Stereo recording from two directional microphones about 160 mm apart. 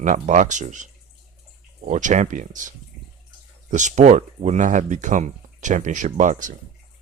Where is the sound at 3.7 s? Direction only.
50° right (ahead or behind).